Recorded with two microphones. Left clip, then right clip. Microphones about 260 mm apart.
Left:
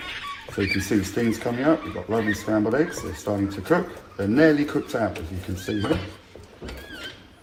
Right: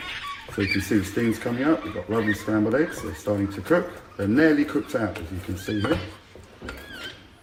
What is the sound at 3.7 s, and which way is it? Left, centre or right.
Speech, centre.